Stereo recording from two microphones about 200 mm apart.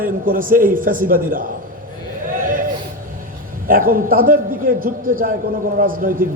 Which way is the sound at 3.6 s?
45° right (ahead or behind).